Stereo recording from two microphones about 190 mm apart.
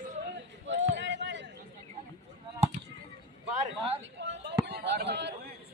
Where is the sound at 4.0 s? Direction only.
70° right (ahead or behind).